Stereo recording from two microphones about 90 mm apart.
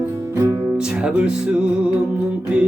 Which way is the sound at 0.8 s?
10° right (ahead or behind).